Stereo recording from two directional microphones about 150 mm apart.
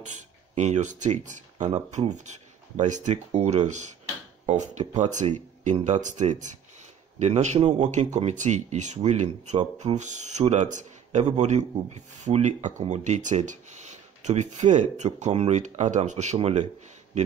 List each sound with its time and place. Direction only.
0.0 s a man's voice: 50° right (ahead or behind)